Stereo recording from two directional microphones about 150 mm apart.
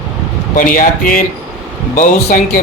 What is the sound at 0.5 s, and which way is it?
Speech, 65° left (ahead or behind).